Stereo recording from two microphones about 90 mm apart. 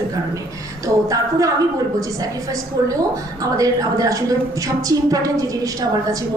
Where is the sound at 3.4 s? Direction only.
40° right (ahead or behind).